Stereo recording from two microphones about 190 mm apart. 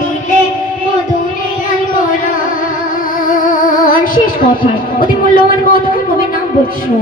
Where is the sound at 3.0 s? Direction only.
45° left (ahead or behind).